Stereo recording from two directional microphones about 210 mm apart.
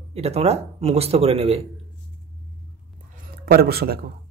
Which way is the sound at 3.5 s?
45° right (ahead or behind).